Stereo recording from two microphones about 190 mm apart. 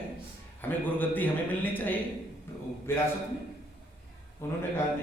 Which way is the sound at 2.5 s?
10° left (ahead or behind).